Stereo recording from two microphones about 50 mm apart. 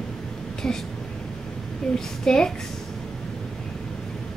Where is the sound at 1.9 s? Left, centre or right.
Centre.